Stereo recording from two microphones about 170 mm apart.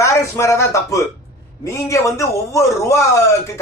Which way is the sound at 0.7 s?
20° left (ahead or behind).